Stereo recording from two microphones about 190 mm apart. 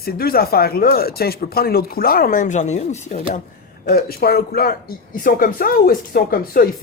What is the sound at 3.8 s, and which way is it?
Speech, 50° left (ahead or behind).